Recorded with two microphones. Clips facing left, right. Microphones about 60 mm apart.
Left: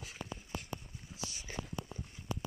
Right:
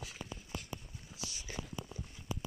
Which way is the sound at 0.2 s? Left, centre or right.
Left.